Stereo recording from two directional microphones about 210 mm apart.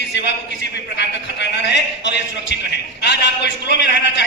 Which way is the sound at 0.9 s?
55° left (ahead or behind).